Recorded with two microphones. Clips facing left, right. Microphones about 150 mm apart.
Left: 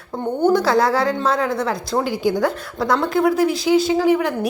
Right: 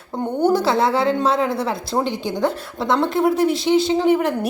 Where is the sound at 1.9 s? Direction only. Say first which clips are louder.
Even; 20° right (ahead or behind).